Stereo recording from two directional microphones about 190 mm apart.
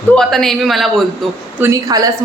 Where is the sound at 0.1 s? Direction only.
Centre (ahead or behind).